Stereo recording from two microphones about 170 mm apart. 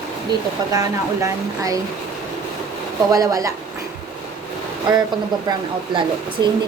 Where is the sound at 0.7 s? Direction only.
20° right (ahead or behind).